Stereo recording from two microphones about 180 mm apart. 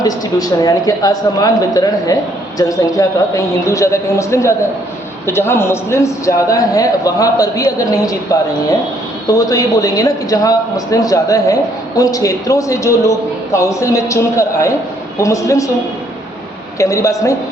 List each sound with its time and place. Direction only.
0.0 s a man's voice: 20° left (ahead or behind)
16.7 s a woman's voice: 15° left (ahead or behind)